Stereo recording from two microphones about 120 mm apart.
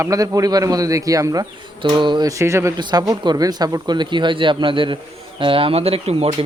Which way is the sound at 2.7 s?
35° right (ahead or behind).